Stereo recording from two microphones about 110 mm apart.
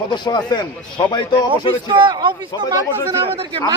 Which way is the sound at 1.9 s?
45° right (ahead or behind).